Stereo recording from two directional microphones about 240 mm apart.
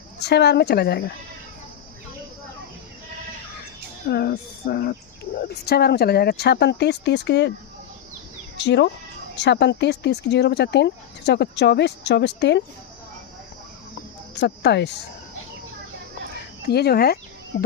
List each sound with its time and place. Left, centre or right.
0.2 s speech: left
4.1 s speech: left
8.5 s speech: left
14.3 s speech: left
16.6 s speech: left